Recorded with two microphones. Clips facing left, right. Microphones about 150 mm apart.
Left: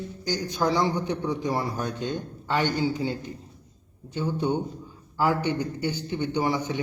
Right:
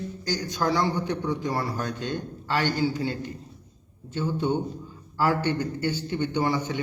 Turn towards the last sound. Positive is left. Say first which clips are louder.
# even
turn(degrees=15)  # may be behind; listen again after turning